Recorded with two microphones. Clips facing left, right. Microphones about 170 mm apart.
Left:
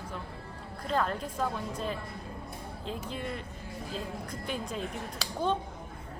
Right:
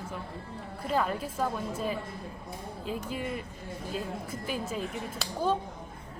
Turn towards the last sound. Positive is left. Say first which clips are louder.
# right 1 dB
turn(degrees=-5)  # may be behind; listen again after turning